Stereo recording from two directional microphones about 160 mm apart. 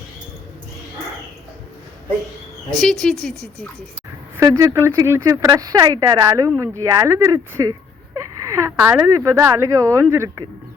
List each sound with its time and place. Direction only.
2.6 s speech: centre (ahead or behind)
4.4 s speech: 20° right (ahead or behind)